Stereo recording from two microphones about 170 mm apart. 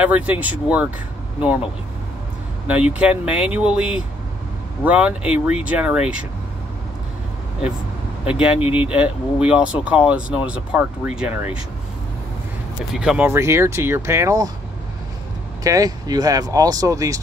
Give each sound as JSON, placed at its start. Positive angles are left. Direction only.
{"t": 0.0, "sound": "speech", "side_deg": -10}
{"t": 2.7, "sound": "speech", "side_deg": -10}
{"t": 8.3, "sound": "speech", "side_deg": -5}
{"t": 12.9, "sound": "speech", "side_deg": -5}
{"t": 13.3, "sound": "speech", "side_deg": -15}
{"t": 15.6, "sound": "speech", "side_deg": -20}